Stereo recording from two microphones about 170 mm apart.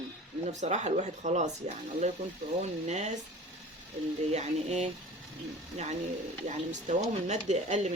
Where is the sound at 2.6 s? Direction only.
45° right (ahead or behind).